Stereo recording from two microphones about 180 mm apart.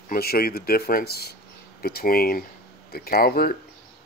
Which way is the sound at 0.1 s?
60° left (ahead or behind).